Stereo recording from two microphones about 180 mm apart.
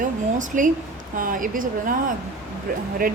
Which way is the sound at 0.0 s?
45° right (ahead or behind).